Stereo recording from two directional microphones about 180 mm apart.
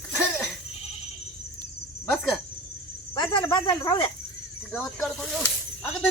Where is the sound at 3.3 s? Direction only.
25° left (ahead or behind).